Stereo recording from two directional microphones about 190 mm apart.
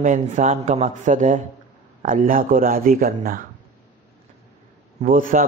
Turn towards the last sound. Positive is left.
turn(degrees=-45)  # may be behind; listen again after turning